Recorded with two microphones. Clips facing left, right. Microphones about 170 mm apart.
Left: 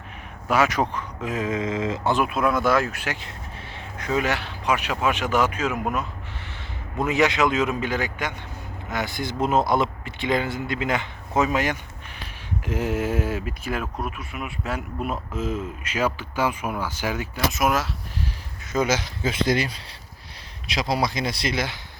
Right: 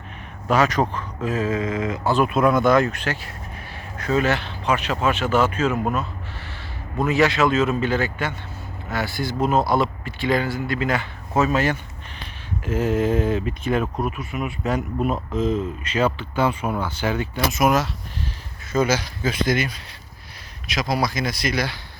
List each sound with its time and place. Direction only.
0.4 s speech: 10° left (ahead or behind)
2.1 s speech: 5° left (ahead or behind)
18.7 s speech: 20° left (ahead or behind)